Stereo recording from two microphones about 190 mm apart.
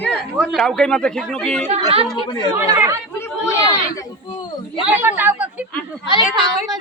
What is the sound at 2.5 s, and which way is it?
Speech, 15° right (ahead or behind).